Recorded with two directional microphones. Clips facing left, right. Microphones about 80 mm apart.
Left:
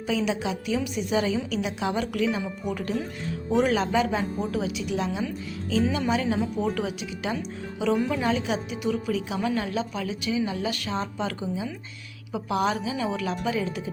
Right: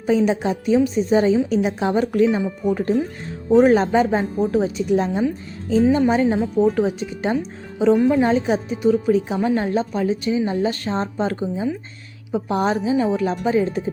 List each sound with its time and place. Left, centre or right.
0.0 s a woman's voice: right